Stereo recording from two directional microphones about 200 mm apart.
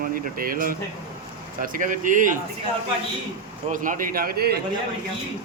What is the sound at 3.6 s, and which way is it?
Speech, 40° right (ahead or behind).